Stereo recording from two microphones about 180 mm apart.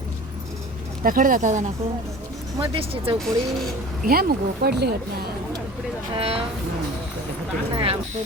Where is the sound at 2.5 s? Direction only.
30° right (ahead or behind).